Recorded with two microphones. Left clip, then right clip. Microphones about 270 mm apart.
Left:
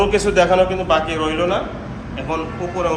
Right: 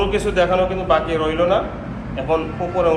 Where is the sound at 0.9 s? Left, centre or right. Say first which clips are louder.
Even; centre.